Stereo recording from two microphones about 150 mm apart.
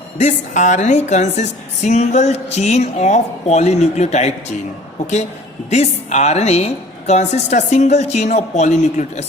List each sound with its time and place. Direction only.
0.2 s a woman's voice: 55° left (ahead or behind)
5.7 s a woman's voice: 50° left (ahead or behind)